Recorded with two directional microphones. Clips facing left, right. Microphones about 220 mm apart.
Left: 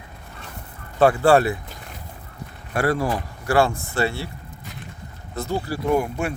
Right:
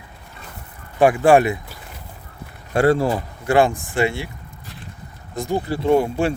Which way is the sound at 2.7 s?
25° right (ahead or behind).